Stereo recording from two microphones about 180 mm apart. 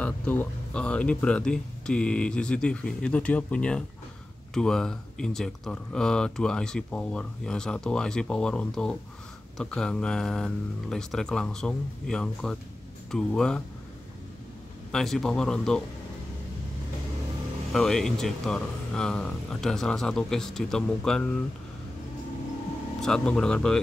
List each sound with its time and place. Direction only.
0.0 s speech: 10° left (ahead or behind)
14.9 s speech: centre (ahead or behind)
17.7 s speech: centre (ahead or behind)
22.9 s speech: 5° left (ahead or behind)